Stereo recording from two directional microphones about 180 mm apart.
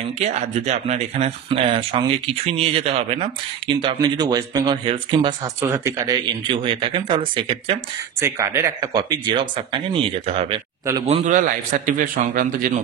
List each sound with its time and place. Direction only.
0.2 s speech: 40° right (ahead or behind)
5.6 s speech: 15° right (ahead or behind); by 7.8 s 30° right (ahead or behind)
8.2 s speech: 15° right (ahead or behind); by 10.6 s 35° right (ahead or behind)
11.1 s a man's voice: 45° right (ahead or behind)